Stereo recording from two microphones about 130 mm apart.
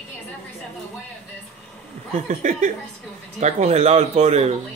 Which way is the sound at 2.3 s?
80° right.